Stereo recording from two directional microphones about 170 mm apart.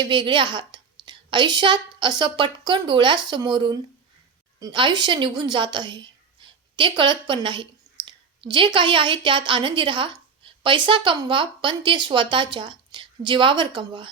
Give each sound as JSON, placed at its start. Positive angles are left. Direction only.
{"t": 0.0, "sound": "a woman's voice", "side_deg": -30}